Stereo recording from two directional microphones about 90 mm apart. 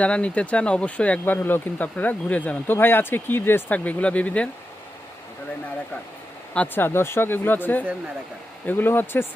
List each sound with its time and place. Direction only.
0.0 s speech: 15° left (ahead or behind)
6.7 s speech: 25° left (ahead or behind)